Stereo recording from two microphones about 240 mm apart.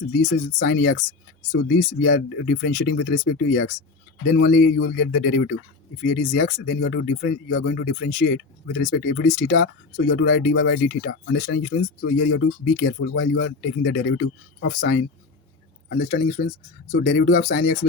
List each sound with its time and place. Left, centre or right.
0.5 s speech: left
4.8 s speech: left
6.7 s speech: left
10.1 s speech: left
12.1 s speech: left
16.0 s speech: left